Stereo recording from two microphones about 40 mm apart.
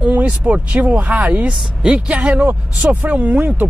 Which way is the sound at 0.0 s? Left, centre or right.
Right.